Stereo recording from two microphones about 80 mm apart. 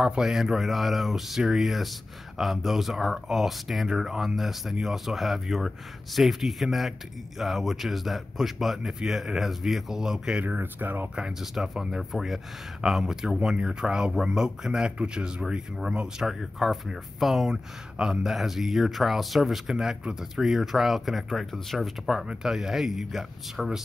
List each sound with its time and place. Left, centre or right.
0.0 s speech: centre
10.4 s speech: right
11.1 s speech: centre